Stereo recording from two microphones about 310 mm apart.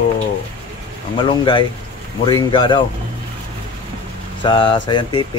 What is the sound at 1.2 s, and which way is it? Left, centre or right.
Speech, centre.